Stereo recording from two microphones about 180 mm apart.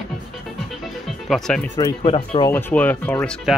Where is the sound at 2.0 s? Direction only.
30° left (ahead or behind).